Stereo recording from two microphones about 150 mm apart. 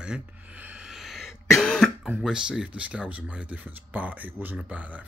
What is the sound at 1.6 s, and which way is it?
Throat clearing, centre (ahead or behind).